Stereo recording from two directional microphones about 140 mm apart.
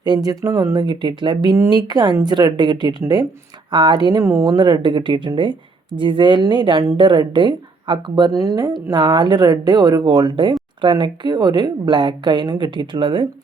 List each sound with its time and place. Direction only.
0.0 s speech: 30° right (ahead or behind)